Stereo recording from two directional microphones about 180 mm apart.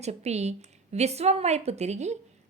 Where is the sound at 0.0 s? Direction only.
35° right (ahead or behind).